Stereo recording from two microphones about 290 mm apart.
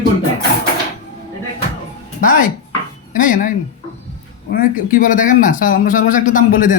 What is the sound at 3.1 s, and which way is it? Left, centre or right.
Speech, left.